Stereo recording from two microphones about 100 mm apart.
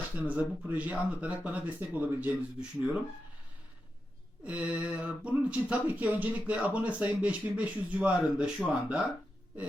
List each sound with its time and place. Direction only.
0.2 s speech: 15° right (ahead or behind)
4.4 s speech: 15° right (ahead or behind)